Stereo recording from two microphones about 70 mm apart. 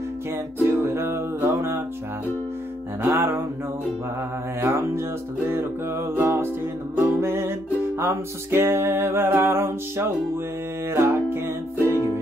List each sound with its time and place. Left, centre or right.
0.7 s music: right
3.0 s music: right
4.6 s music: right